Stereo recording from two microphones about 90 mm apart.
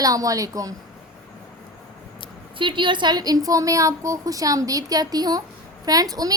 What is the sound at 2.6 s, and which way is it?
A woman's voice, 65° right (ahead or behind).